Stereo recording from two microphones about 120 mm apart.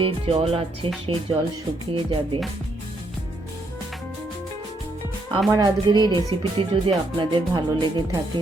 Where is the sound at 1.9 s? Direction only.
45° right (ahead or behind).